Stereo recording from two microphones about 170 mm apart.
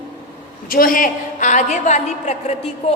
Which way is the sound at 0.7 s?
55° left (ahead or behind).